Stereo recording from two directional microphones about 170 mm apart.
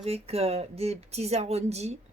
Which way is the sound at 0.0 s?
35° right (ahead or behind).